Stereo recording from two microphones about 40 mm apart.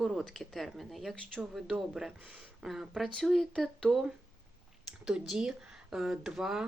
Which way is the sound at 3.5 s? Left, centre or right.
Centre.